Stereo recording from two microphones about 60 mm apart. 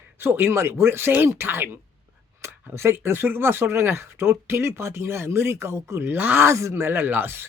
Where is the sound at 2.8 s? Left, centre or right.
Right.